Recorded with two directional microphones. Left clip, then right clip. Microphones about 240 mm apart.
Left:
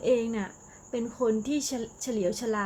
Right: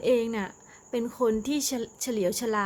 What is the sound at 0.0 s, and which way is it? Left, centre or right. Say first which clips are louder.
Speech: right 1 dB; centre.